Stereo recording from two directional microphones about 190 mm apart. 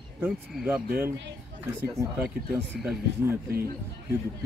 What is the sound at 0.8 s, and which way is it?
Speech, 60° right (ahead or behind).